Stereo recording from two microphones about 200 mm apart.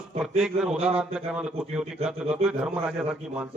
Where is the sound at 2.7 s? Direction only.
5° right (ahead or behind).